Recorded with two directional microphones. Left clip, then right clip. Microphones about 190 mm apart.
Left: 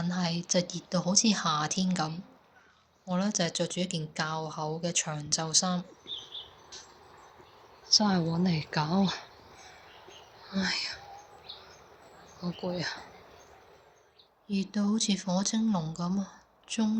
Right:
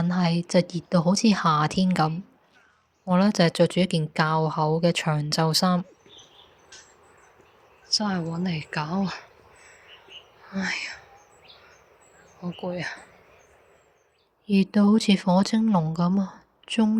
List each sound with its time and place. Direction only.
0.1 s speech: 45° right (ahead or behind)
7.9 s speech: 5° right (ahead or behind)
10.4 s speech: 15° right (ahead or behind)
12.4 s speech: 15° right (ahead or behind)
14.4 s speech: 50° right (ahead or behind)